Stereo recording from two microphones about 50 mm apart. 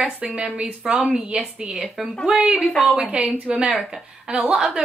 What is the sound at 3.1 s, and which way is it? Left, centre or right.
Speech, centre.